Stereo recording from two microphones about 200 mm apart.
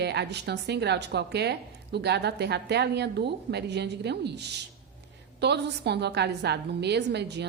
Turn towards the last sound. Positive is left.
turn(degrees=-55)  # may be behind; listen again after turning